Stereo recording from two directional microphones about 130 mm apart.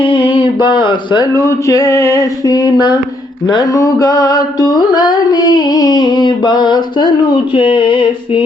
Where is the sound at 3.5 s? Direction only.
30° left (ahead or behind).